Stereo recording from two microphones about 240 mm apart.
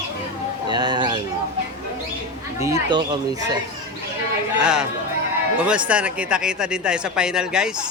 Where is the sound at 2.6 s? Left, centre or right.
Centre.